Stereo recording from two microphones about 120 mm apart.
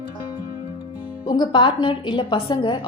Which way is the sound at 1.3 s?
40° left (ahead or behind).